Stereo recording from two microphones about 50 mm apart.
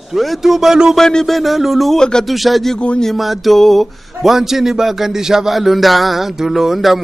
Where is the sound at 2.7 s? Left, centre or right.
Left.